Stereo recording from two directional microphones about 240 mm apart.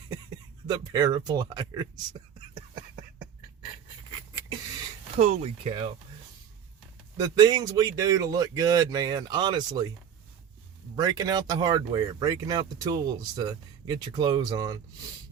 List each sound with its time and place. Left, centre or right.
0.7 s speech: centre
5.1 s speech: right
7.2 s speech: centre
10.9 s speech: centre